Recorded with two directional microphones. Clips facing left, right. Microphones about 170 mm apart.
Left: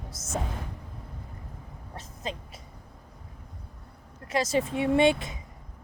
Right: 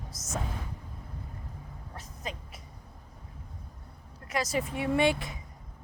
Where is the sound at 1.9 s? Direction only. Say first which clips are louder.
Left 4 dB; 25° left (ahead or behind).